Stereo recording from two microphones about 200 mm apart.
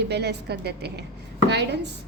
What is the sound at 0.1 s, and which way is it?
A woman's voice, 55° right (ahead or behind).